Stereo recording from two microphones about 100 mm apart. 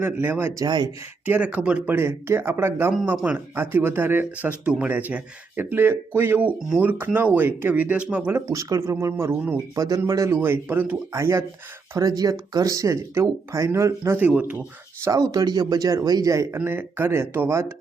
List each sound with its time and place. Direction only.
0.0 s speech: 20° right (ahead or behind)
0.6 s speech: 45° right (ahead or behind)
1.2 s speech: 15° right (ahead or behind)
8.4 s speech: 35° right (ahead or behind)
9.7 s speech: 35° right (ahead or behind)
14.2 s speech: 15° right (ahead or behind)
15.0 s speech: 35° right (ahead or behind)
16.6 s speech: 20° right (ahead or behind)